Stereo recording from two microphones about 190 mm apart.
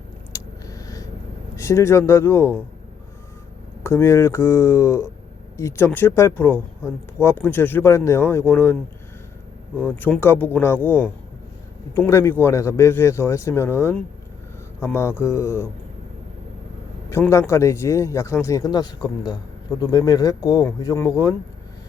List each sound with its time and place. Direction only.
0.3 s a sound: 15° left (ahead or behind)
1.5 s speech: 15° left (ahead or behind)
3.8 s speech: 15° left (ahead or behind)
9.8 s speech: 10° left (ahead or behind)
17.1 s speech: 15° left (ahead or behind)